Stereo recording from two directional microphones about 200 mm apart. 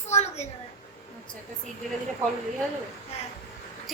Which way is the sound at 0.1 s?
30° left (ahead or behind).